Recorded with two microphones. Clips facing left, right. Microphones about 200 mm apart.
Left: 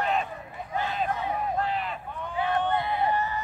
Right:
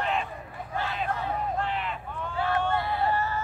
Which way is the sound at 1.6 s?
40° left (ahead or behind).